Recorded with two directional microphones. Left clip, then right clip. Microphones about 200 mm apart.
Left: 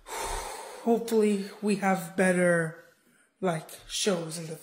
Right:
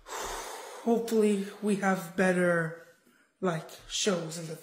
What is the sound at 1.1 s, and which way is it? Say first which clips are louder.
Speech: left 1 dB; 20° left (ahead or behind).